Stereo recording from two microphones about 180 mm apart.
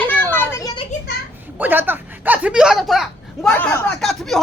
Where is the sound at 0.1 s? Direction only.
10° left (ahead or behind).